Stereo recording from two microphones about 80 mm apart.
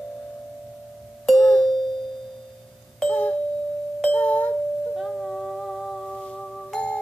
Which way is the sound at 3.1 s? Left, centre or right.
Left.